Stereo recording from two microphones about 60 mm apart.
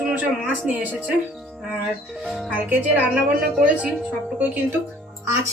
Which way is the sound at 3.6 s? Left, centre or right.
Right.